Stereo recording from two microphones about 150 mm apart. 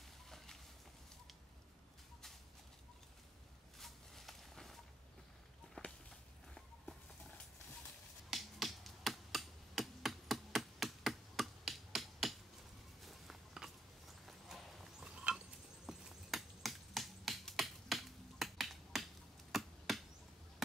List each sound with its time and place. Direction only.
3.8 s a sound: centre (ahead or behind)
5.8 s whip: 10° left (ahead or behind)
6.5 s walk: 5° left (ahead or behind)
8.3 s finger snapping: centre (ahead or behind)
13.0 s walk: centre (ahead or behind)
14.2 s horse: centre (ahead or behind)
15.9 s finger snapping: centre (ahead or behind)
19.5 s chop: centre (ahead or behind)